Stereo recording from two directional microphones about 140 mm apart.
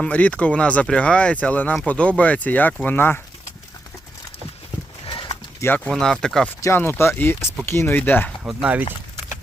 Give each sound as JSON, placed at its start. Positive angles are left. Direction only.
{"t": 0.0, "sound": "speech", "side_deg": 10}
{"t": 5.0, "sound": "livestock", "side_deg": 35}
{"t": 5.5, "sound": "speech", "side_deg": 15}
{"t": 6.6, "sound": "speech", "side_deg": 15}